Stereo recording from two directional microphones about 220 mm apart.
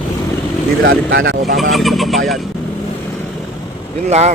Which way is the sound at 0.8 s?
60° right (ahead or behind).